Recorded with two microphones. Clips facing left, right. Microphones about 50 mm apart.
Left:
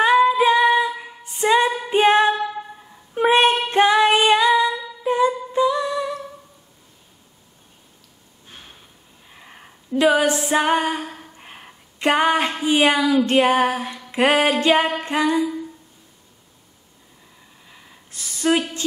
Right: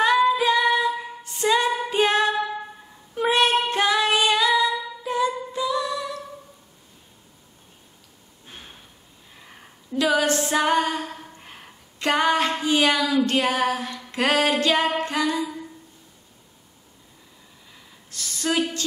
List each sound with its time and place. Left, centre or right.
0.0 s female singing: centre
5.0 s humming: left
9.3 s sniff: centre
9.9 s female singing: left
11.1 s a sound: centre
17.6 s a sound: centre